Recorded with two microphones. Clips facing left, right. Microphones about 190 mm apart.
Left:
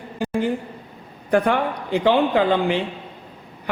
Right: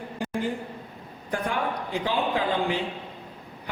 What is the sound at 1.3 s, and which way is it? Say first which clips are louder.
A man's voice: left 9 dB; 75° left (ahead or behind).